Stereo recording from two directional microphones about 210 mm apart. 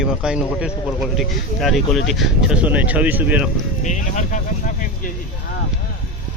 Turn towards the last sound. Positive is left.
turn(degrees=35)  # may be behind; listen again after turning